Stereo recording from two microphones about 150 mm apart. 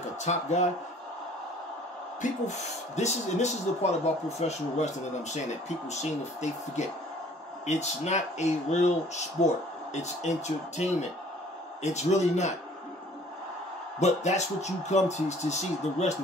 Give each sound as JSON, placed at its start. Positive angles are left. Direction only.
{"t": 0.2, "sound": "speech", "side_deg": 50}
{"t": 2.4, "sound": "speech", "side_deg": 50}
{"t": 13.9, "sound": "speech", "side_deg": 50}